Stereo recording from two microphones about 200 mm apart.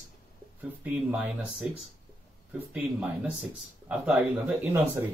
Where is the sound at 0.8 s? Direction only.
5° right (ahead or behind).